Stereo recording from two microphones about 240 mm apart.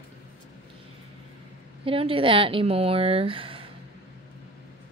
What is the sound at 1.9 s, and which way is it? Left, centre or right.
A woman's voice, right.